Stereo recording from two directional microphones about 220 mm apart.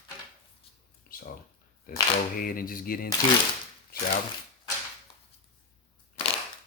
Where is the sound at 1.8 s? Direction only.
40° left (ahead or behind).